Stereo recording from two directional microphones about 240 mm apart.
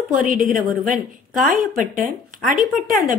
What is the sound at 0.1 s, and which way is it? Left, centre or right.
Speech, right.